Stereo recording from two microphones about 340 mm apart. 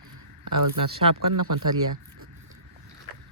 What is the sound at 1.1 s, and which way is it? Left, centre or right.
Speech, right.